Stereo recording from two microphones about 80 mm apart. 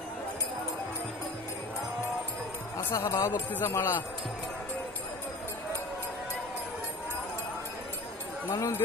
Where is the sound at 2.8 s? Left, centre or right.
Left.